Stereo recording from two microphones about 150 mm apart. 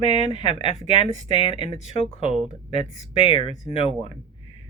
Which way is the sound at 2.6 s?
40° left (ahead or behind).